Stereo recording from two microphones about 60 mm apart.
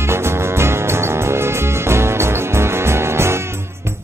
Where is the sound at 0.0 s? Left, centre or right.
Right.